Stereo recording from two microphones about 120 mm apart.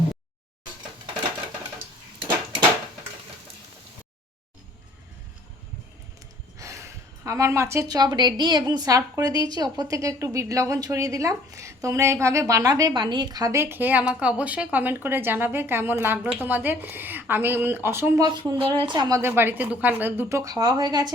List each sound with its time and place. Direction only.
6.6 s a woman's voice: 25° right (ahead or behind)
18.3 s a woman's voice: 50° right (ahead or behind)
19.2 s a woman's voice: 20° right (ahead or behind); by 21.1 s 35° right (ahead or behind)